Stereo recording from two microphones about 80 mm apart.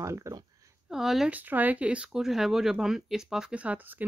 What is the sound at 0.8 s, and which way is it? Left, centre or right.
Speech, centre.